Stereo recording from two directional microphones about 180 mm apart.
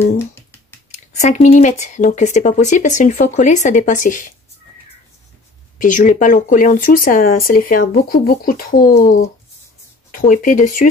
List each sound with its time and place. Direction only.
0.3 s finger snapping: 15° left (ahead or behind)
1.2 s speech: 40° left (ahead or behind)
5.8 s speech: 45° left (ahead or behind)